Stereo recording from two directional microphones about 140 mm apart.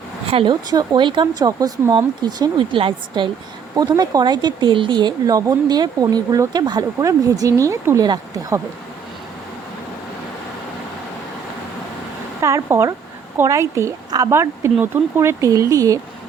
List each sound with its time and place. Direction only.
0.3 s speech: 40° right (ahead or behind)
12.4 s speech: 20° right (ahead or behind)